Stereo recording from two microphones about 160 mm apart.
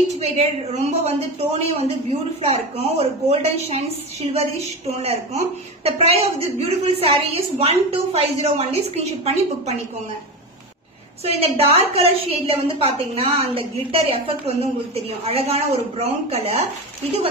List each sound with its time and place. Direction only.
0.2 s a woman's voice: 40° right (ahead or behind)
11.2 s a woman's voice: 40° right (ahead or behind)